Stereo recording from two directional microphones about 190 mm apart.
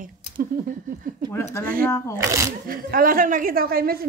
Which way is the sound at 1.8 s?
15° left (ahead or behind).